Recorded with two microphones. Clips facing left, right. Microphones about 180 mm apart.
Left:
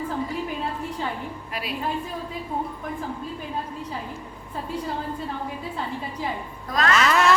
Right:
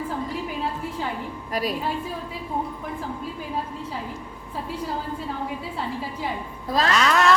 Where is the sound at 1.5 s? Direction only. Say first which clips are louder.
Right 8 dB; 40° right (ahead or behind).